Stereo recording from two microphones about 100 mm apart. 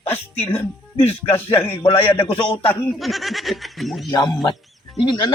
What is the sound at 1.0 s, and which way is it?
Speech, 75° left (ahead or behind).